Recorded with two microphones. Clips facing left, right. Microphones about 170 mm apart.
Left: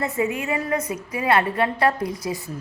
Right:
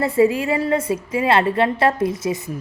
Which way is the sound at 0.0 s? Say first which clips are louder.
Right 8 dB; 30° right (ahead or behind).